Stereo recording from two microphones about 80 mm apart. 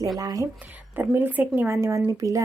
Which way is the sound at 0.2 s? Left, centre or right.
Right.